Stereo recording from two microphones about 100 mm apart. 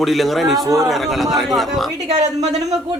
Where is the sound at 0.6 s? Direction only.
35° right (ahead or behind).